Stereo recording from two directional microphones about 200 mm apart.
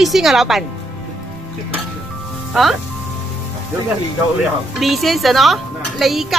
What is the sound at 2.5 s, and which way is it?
Speech, centre (ahead or behind).